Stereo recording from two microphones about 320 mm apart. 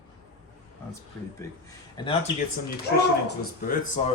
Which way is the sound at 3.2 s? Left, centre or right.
Left.